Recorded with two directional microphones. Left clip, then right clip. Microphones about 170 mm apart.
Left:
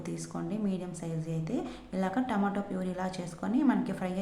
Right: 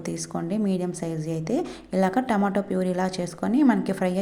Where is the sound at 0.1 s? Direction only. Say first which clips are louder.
Right 8 dB; 40° right (ahead or behind).